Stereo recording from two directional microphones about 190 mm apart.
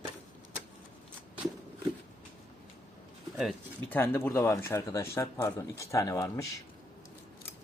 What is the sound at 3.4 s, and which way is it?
Speech, 10° left (ahead or behind).